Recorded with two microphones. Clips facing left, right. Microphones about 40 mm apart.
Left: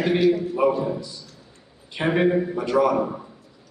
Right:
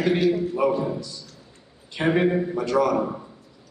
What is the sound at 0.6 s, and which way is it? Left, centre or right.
Speech, centre.